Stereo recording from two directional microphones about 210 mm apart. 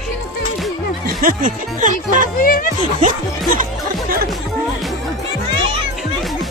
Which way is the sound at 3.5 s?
40° right (ahead or behind).